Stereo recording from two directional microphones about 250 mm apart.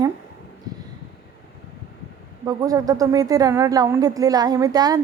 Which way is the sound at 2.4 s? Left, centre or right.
Centre.